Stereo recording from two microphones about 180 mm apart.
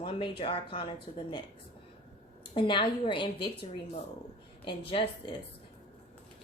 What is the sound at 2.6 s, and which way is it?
Speech, 25° left (ahead or behind).